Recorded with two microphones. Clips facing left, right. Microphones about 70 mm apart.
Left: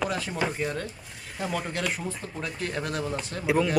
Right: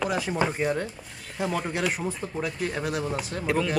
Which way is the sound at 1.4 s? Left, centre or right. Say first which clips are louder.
Right 3 dB; centre.